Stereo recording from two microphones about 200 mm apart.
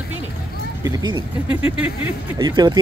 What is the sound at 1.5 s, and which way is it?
Speech, 5° right (ahead or behind).